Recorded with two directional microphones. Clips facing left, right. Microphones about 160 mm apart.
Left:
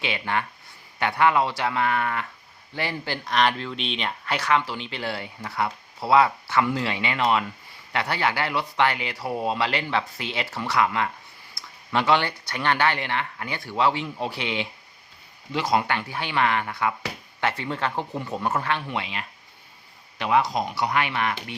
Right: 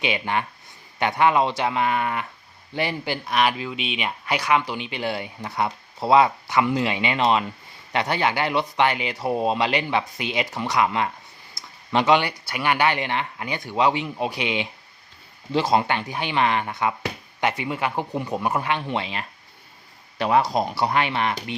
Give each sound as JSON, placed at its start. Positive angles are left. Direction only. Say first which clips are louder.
{"t": 0.0, "sound": "speech", "louder": "right 3 dB", "side_deg": -20}